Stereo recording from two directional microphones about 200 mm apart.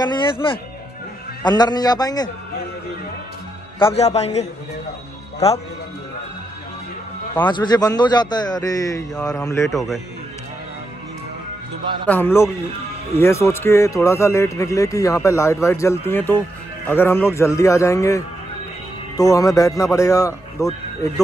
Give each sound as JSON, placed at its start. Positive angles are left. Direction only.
{"t": 0.0, "sound": "a man's voice", "side_deg": 25}
{"t": 3.8, "sound": "a man's voice", "side_deg": 30}
{"t": 7.3, "sound": "a man's voice", "side_deg": 20}
{"t": 9.7, "sound": "a man's voice", "side_deg": 0}
{"t": 12.1, "sound": "speech", "side_deg": 10}